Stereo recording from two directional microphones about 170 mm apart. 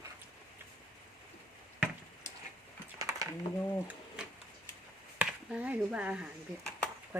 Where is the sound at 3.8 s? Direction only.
5° right (ahead or behind).